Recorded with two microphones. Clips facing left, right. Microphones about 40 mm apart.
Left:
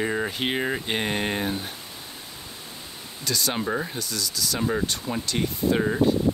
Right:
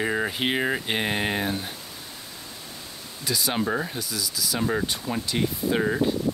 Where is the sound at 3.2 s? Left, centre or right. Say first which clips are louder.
Right 1 dB; centre.